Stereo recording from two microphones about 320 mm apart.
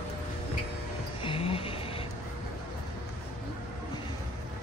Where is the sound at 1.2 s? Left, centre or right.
Centre.